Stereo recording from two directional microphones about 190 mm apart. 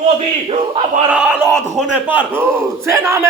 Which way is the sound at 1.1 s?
5° right (ahead or behind).